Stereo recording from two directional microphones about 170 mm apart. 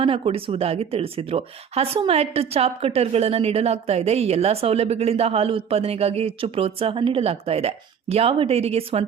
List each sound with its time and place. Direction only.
0.0 s speech: 35° right (ahead or behind)